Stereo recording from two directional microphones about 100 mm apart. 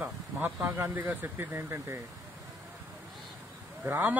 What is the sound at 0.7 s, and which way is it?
A man's voice, 20° right (ahead or behind).